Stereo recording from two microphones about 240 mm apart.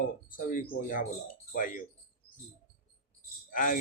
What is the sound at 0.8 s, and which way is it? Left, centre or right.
Speech, left.